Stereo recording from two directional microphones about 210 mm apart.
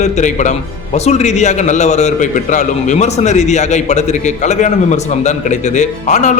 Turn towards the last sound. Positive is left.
turn(degrees=35)  # may be behind; listen again after turning